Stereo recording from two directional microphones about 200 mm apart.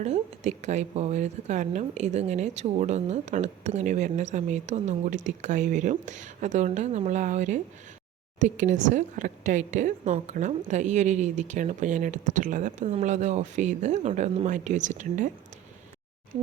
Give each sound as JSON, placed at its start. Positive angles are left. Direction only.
{"t": 0.0, "sound": "a woman's voice", "side_deg": -35}